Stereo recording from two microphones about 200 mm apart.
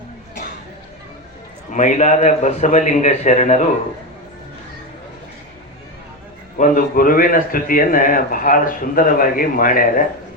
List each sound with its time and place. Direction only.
1.7 s a man's voice: 40° left (ahead or behind)
6.6 s a man's voice: 45° left (ahead or behind)